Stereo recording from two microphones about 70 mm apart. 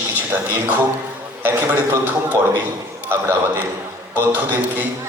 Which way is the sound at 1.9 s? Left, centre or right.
Right.